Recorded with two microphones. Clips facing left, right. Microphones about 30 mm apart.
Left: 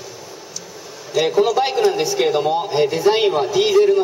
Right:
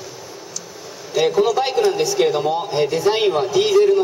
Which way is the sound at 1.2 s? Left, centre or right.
Centre.